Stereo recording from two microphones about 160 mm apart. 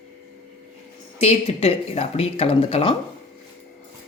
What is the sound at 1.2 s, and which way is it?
Speech, 40° left (ahead or behind).